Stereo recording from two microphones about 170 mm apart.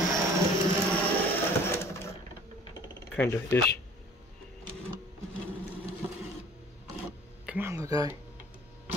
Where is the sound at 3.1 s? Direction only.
10° left (ahead or behind).